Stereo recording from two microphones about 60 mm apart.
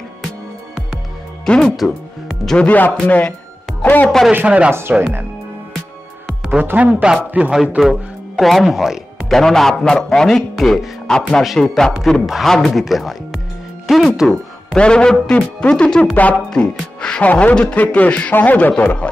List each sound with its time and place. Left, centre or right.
1.4 s speech: centre
4.3 s speech: right
6.6 s speech: right
6.9 s speech: centre
7.7 s speech: centre
9.3 s speech: centre
14.3 s speech: centre
16.4 s speech: centre
17.3 s speech: left